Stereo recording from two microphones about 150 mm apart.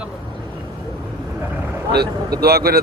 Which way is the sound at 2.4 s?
90° right.